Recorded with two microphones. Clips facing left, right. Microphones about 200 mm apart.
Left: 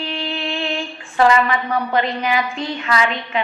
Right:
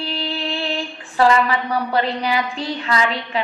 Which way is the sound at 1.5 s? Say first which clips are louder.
Left 1 dB; 35° right (ahead or behind).